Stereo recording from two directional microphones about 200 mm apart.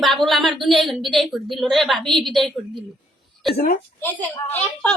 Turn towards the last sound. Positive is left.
turn(degrees=5)  # may be behind; listen again after turning